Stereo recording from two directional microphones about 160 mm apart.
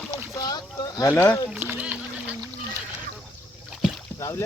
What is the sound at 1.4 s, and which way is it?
Rowboat, 10° right (ahead or behind).